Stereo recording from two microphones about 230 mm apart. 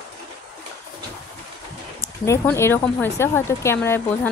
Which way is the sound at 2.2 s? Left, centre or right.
Centre.